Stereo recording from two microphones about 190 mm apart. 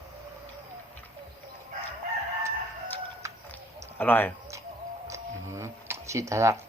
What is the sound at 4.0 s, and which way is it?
Speech, 10° left (ahead or behind).